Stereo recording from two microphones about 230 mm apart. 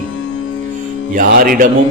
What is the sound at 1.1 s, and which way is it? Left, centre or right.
Speech, right.